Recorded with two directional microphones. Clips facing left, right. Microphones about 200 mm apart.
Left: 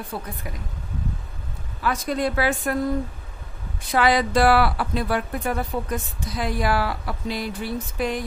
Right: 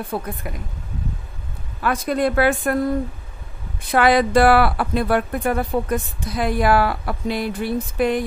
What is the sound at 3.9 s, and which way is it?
Speech, 55° right (ahead or behind).